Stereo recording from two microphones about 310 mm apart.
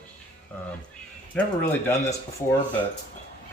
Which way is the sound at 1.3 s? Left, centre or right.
Centre.